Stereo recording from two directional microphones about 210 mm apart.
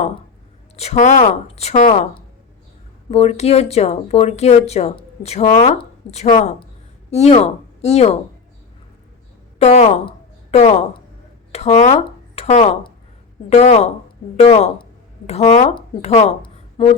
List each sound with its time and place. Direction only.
0.8 s speech: 35° left (ahead or behind)
3.1 s speech: 30° left (ahead or behind)
9.6 s a woman's voice: 30° left (ahead or behind)